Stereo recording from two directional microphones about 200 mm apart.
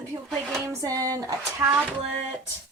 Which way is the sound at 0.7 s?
15° right (ahead or behind).